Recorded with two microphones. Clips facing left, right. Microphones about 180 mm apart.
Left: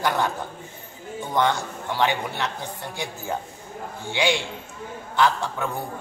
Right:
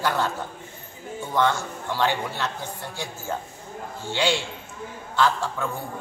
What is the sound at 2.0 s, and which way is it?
Speech, 15° left (ahead or behind).